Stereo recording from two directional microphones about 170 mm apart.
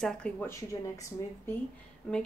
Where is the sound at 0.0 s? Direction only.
5° left (ahead or behind).